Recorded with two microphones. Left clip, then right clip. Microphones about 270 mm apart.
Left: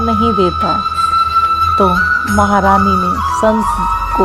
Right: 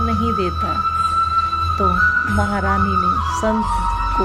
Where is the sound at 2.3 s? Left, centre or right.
Centre.